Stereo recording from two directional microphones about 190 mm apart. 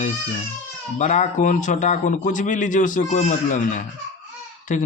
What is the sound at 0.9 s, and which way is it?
Speech, 40° left (ahead or behind).